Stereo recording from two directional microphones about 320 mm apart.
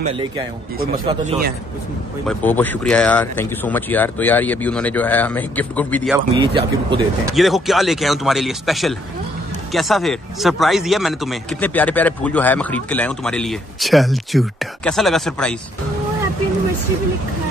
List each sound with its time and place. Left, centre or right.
0.0 s speech: centre
2.2 s a man's voice: centre
6.1 s speech: centre
7.3 s a man's voice: centre